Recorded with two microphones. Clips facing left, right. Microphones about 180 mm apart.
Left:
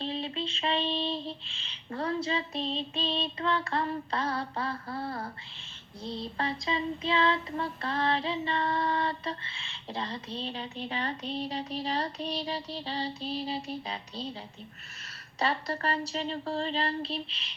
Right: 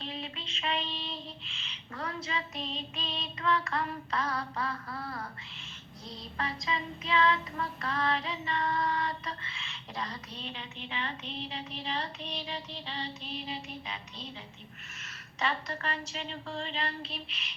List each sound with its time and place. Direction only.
0.0 s child singing: 30° left (ahead or behind)
15.4 s child singing: 35° left (ahead or behind)